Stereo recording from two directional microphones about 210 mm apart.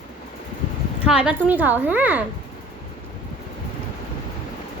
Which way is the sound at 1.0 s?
5° right (ahead or behind).